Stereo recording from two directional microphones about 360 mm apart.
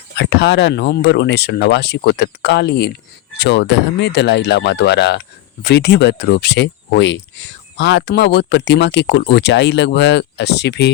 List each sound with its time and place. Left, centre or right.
0.2 s speech: left